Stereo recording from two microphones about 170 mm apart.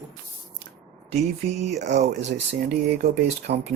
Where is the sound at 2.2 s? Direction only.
90° right.